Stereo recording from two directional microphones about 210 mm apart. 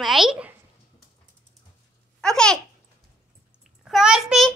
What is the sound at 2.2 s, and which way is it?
Speech, 5° left (ahead or behind).